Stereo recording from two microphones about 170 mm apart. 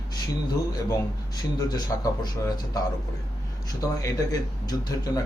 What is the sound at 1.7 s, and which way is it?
Speech, 25° left (ahead or behind).